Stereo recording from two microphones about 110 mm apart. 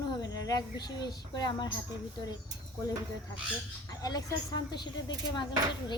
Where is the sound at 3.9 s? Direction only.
35° left (ahead or behind).